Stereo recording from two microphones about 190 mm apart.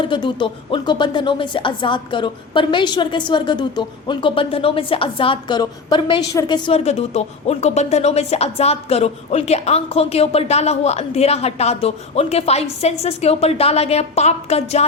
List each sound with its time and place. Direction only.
0.0 s speech: 25° left (ahead or behind)